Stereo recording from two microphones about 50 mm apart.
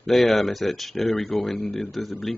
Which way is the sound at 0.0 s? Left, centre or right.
Centre.